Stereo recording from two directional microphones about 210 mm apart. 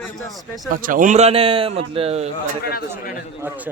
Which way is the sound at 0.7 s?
40° right (ahead or behind).